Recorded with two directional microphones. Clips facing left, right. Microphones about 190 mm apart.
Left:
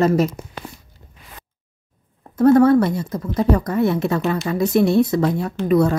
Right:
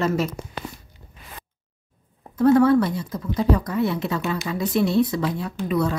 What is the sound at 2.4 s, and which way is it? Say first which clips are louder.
A woman's voice: left 3 dB; 45° left (ahead or behind).